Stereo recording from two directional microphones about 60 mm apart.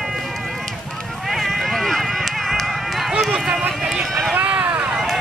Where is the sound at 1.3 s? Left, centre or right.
Centre.